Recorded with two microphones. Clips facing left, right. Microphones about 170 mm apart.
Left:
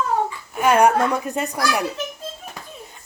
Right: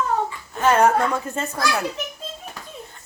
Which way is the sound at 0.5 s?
15° left (ahead or behind).